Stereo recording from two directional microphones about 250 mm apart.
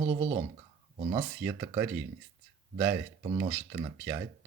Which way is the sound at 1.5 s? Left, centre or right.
Centre.